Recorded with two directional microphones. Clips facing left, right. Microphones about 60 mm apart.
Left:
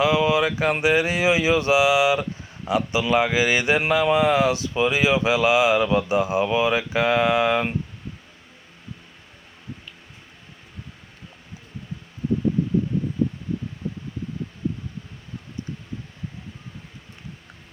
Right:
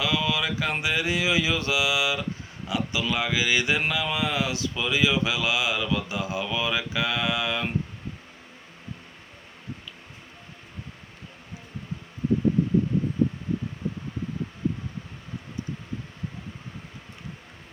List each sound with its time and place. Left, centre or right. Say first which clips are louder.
0.0 s speech: left 7 dB; left